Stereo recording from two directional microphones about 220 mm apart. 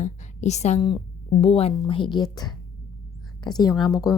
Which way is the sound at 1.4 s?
25° left (ahead or behind).